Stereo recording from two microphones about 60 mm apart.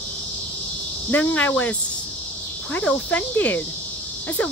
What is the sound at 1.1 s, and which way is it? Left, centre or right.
Cricket, left.